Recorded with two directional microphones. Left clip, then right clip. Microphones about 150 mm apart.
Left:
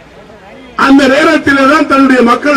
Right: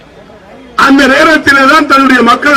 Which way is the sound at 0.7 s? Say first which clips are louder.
Right 2 dB; 35° right (ahead or behind).